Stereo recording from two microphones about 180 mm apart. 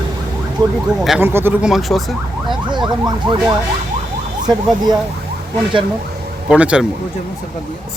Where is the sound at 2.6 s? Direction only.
25° right (ahead or behind).